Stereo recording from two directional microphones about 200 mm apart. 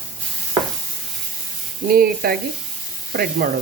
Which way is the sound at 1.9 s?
50° right (ahead or behind).